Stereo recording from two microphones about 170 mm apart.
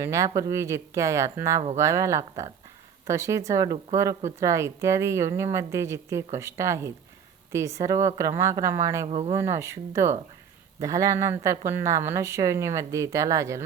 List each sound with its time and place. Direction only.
0.0 s speech: 15° right (ahead or behind)
9.0 s speech: 35° right (ahead or behind)
9.3 s speech: 15° right (ahead or behind)